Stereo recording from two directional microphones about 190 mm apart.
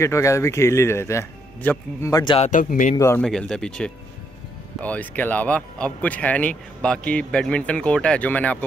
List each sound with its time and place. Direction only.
0.0 s speech: 15° left (ahead or behind)
2.3 s speech: 40° left (ahead or behind)
3.0 s speech: 15° left (ahead or behind)
3.3 s speech: 5° left (ahead or behind)